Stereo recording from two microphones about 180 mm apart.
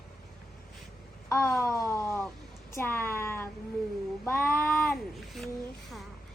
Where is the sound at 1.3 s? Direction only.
15° left (ahead or behind).